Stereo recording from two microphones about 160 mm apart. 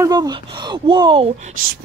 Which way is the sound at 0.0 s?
25° right (ahead or behind).